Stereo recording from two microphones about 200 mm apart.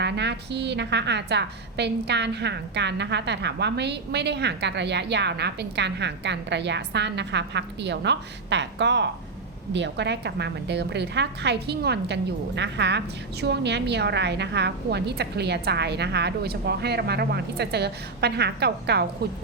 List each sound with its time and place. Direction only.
0.0 s a woman's voice: 60° right (ahead or behind)